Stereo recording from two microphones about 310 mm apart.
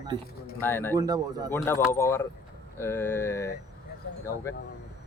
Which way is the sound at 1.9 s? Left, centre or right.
Centre.